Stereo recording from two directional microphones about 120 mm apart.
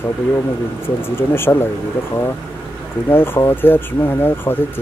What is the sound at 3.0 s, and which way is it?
Speech, 20° left (ahead or behind).